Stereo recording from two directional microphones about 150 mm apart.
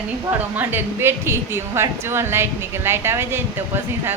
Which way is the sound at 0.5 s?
10° right (ahead or behind).